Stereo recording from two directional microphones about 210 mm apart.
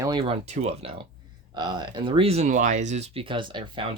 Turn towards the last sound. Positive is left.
turn(degrees=-20)  # may be behind; listen again after turning